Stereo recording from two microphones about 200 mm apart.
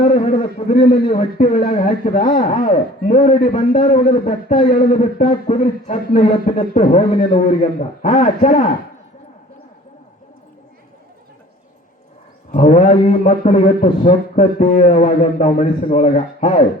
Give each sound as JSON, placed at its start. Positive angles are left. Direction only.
{"t": 0.1, "sound": "a man's voice", "side_deg": 35}
{"t": 6.7, "sound": "a man's voice", "side_deg": 25}
{"t": 12.5, "sound": "a man's voice", "side_deg": 40}
{"t": 14.8, "sound": "a man's voice", "side_deg": 40}